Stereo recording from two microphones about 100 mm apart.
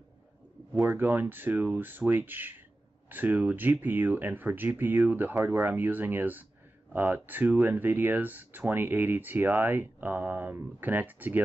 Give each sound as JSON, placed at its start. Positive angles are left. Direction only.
{"t": 0.7, "sound": "speech", "side_deg": -20}